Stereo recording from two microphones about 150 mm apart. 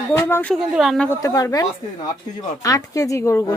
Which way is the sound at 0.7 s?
Centre (ahead or behind).